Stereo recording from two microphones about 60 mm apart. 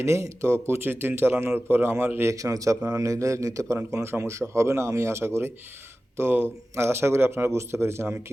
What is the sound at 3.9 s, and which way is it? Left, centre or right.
A man's voice, right.